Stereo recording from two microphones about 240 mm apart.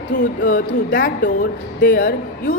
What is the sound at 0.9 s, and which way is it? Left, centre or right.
A woman's voice, left.